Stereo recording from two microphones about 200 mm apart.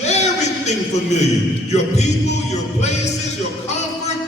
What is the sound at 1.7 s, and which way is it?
Music, 35° left (ahead or behind).